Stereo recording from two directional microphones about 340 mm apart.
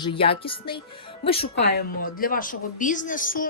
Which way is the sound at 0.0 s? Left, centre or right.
Centre.